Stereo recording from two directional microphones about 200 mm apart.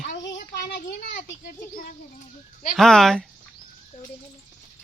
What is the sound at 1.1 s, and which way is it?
Speech, 45° left (ahead or behind).